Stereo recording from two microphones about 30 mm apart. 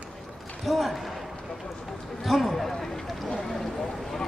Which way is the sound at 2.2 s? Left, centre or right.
Centre.